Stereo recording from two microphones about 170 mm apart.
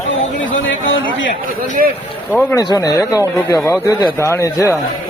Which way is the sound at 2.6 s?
20° left (ahead or behind).